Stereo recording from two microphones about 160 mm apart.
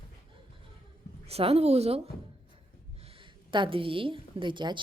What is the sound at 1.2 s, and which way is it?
A woman's voice, 40° right (ahead or behind).